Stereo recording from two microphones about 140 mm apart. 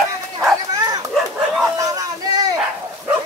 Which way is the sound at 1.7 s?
25° right (ahead or behind).